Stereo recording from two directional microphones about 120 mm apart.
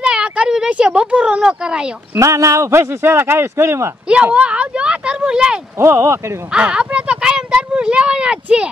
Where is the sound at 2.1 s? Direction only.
25° right (ahead or behind).